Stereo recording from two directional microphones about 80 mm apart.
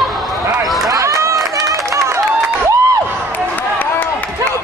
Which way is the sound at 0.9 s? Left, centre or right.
Right.